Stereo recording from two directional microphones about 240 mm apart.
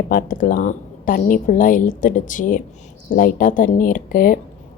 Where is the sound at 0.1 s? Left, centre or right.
Left.